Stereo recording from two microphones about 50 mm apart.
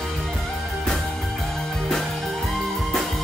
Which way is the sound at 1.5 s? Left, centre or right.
Centre.